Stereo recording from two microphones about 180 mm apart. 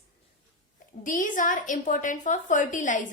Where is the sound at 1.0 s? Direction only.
45° left (ahead or behind).